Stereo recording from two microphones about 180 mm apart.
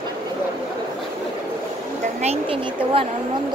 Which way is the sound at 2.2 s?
35° right (ahead or behind).